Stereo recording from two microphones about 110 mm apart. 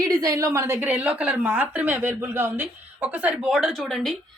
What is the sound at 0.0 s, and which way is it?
A woman's voice, 30° right (ahead or behind).